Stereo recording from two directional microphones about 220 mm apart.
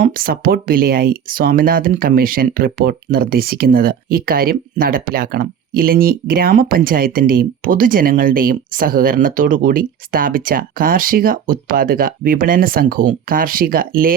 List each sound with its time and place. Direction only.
0.0 s speech: 40° right (ahead or behind)